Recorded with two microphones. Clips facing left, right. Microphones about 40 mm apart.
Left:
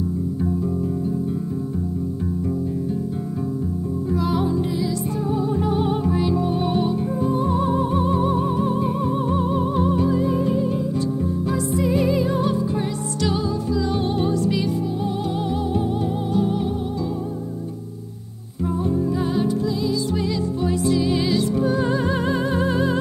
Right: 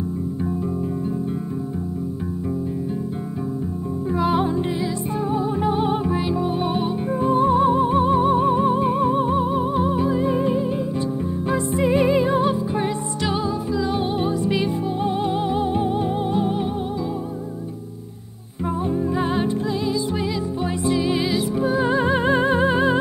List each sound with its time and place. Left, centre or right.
4.1 s music: right
5.3 s music: right
18.9 s music: right